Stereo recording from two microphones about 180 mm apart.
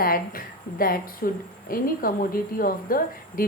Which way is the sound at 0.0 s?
55° left (ahead or behind).